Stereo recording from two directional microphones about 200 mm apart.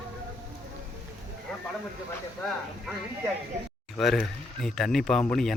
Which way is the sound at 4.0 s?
Centre (ahead or behind).